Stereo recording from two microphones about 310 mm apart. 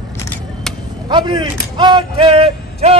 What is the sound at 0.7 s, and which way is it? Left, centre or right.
Chop, centre.